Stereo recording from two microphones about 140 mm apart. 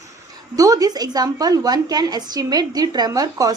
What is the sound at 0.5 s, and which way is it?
A woman's voice, 25° right (ahead or behind).